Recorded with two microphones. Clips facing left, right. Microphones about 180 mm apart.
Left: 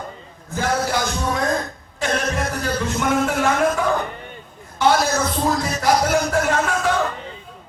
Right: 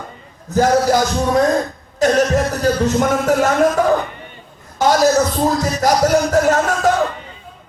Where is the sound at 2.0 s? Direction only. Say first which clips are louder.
Right 8 dB; 40° right (ahead or behind).